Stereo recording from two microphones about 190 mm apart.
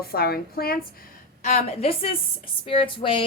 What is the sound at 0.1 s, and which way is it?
Speech, 55° left (ahead or behind).